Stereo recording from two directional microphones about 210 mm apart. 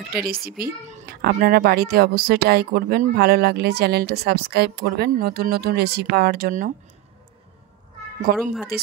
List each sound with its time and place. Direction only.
0.3 s speech: 45° right (ahead or behind)
8.3 s speech: 45° right (ahead or behind)